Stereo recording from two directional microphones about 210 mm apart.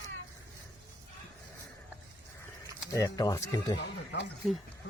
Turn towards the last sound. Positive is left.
turn(degrees=60)  # may be behind; listen again after turning